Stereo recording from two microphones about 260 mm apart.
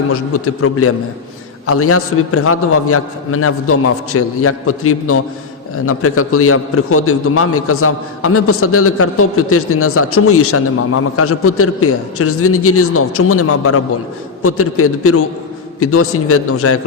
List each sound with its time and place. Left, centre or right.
0.1 s a man's voice: left